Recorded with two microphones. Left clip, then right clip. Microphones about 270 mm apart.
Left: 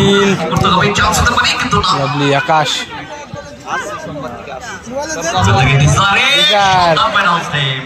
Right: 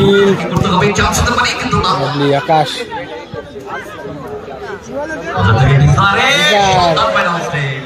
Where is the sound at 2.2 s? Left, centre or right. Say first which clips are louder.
Right 1 dB; centre.